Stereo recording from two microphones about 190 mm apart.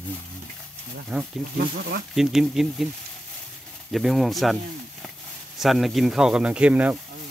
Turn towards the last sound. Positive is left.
turn(degrees=-5)  # may be behind; listen again after turning